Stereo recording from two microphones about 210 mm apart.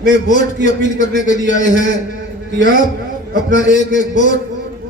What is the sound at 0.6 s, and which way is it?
A man's voice, 35° left (ahead or behind).